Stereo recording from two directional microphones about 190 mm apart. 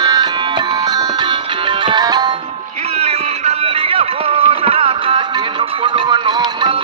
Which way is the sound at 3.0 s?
35° right (ahead or behind).